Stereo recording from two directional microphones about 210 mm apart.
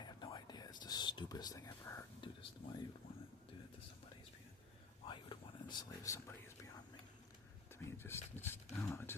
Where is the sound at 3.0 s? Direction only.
45° left (ahead or behind).